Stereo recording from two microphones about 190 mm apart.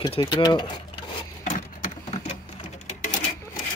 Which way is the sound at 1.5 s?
40° left (ahead or behind).